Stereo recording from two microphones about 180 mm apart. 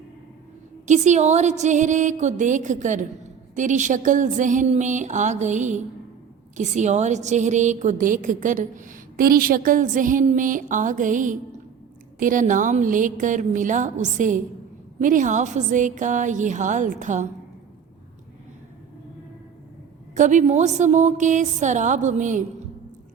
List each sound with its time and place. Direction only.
0.9 s a woman's voice: 40° right (ahead or behind)
20.1 s a woman's voice: 45° right (ahead or behind)